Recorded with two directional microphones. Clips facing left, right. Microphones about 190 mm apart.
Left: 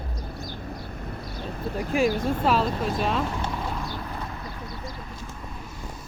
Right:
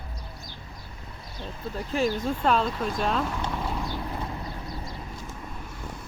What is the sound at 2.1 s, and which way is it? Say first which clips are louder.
Speech: left 2 dB; 50° left (ahead or behind).